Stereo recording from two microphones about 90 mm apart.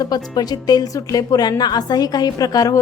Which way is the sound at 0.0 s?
45° left (ahead or behind).